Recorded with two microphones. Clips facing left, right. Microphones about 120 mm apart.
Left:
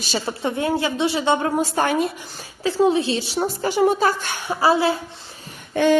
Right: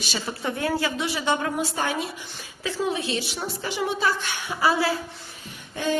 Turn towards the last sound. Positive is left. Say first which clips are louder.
# left 9 dB
turn(degrees=70)  # may be behind; listen again after turning